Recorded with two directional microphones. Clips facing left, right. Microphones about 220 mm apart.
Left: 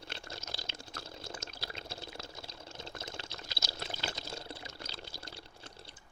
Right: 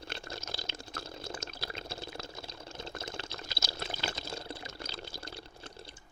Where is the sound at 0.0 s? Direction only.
50° right (ahead or behind).